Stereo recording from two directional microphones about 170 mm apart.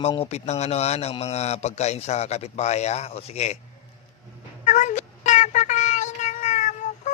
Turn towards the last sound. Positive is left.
turn(degrees=45)  # may be behind; listen again after turning